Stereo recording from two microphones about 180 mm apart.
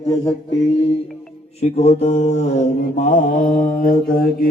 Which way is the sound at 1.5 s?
35° left (ahead or behind).